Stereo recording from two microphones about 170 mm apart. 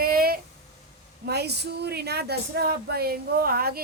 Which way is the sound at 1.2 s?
75° right (ahead or behind).